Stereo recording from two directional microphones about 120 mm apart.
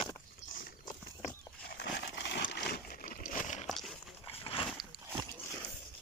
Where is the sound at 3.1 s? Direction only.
90° left.